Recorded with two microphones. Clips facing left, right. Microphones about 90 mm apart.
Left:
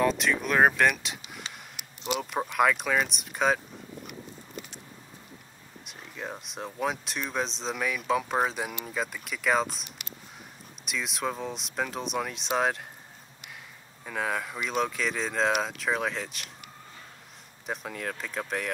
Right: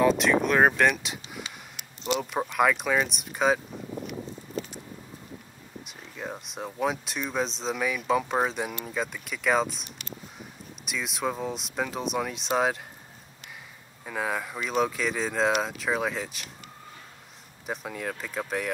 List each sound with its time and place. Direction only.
0.0 s speech: centre (ahead or behind)
1.5 s a sound: 30° left (ahead or behind)
2.0 s speech: 5° left (ahead or behind)
5.9 s speech: centre (ahead or behind)
10.9 s speech: centre (ahead or behind)
14.0 s speech: 5° right (ahead or behind)
17.6 s speech: 5° right (ahead or behind)